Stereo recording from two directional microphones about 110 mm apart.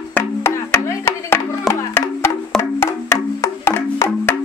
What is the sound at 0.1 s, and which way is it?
Music, 25° left (ahead or behind).